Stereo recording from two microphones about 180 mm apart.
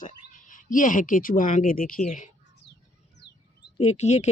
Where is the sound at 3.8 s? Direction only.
35° left (ahead or behind).